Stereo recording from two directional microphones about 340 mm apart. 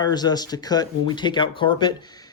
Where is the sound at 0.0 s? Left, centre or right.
Centre.